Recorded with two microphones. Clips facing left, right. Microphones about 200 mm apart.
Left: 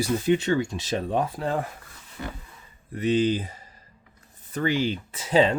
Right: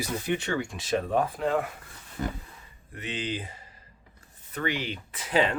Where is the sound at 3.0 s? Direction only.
40° left (ahead or behind).